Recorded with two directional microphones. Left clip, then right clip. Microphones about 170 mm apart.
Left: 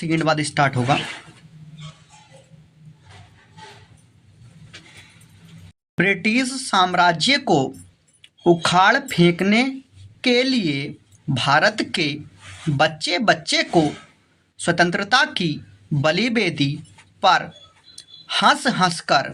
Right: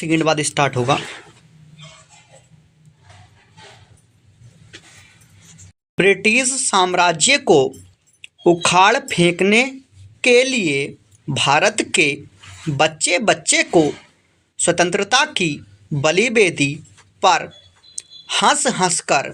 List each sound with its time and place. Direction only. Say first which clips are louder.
0.0 s a man's voice: right 3 dB; 20° right (ahead or behind)
6.0 s a man's voice: right 5 dB; 25° right (ahead or behind)